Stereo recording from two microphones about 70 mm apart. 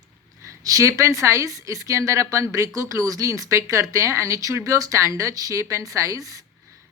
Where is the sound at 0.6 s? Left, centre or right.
Right.